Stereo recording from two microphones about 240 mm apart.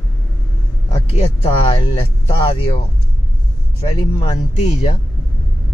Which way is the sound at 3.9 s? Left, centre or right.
Left.